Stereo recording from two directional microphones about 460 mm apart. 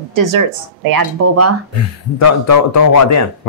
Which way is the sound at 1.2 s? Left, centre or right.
Right.